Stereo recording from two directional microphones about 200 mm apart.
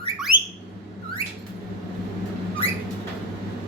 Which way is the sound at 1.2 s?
30° left (ahead or behind).